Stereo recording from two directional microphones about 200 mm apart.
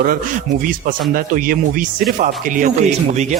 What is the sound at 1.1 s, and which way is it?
Speech, 45° right (ahead or behind).